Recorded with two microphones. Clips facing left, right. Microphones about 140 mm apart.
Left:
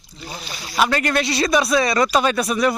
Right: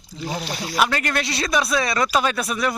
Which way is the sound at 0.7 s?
Centre (ahead or behind).